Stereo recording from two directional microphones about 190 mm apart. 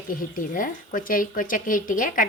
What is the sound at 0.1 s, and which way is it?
Speech, 45° left (ahead or behind).